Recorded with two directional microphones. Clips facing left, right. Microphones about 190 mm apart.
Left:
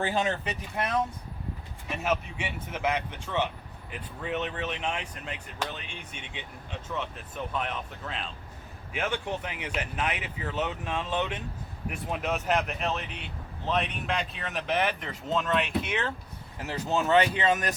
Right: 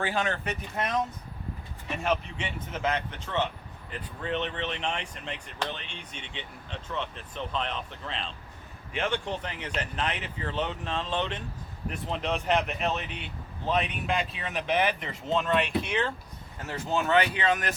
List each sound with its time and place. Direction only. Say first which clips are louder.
0.0 s speech: left 1 dB; 15° left (ahead or behind)
17.3 s speech: left 1 dB; 25° left (ahead or behind)